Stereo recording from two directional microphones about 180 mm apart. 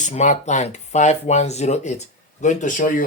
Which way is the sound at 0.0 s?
40° left (ahead or behind).